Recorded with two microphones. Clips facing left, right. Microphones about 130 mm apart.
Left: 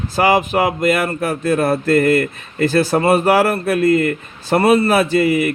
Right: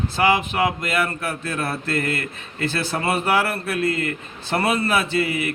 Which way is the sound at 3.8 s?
30° right (ahead or behind).